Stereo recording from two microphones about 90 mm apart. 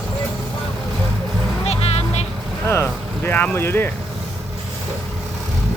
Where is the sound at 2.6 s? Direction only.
25° left (ahead or behind).